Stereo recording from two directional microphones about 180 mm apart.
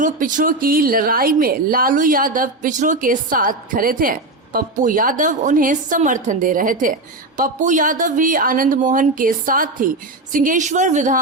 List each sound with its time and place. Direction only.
0.0 s a woman's voice: 45° right (ahead or behind)